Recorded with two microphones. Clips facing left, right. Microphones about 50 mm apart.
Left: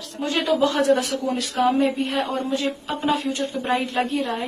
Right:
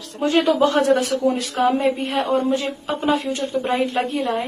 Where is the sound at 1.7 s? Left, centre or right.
Centre.